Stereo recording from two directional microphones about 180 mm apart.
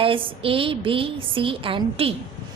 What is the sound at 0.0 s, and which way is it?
A woman's voice, 30° right (ahead or behind).